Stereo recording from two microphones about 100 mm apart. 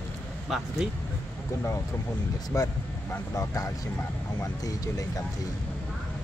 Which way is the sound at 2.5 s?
35° left (ahead or behind).